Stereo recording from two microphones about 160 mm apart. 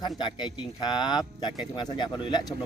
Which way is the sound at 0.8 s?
25° left (ahead or behind).